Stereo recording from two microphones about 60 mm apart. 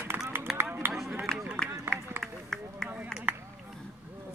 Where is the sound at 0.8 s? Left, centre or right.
Right.